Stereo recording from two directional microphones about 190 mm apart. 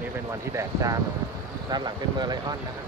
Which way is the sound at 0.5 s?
15° right (ahead or behind).